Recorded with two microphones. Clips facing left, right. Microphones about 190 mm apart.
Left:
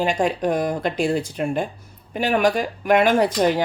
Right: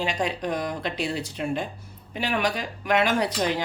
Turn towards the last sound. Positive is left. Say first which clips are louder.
# left 6 dB
turn(degrees=50)  # may be behind; listen again after turning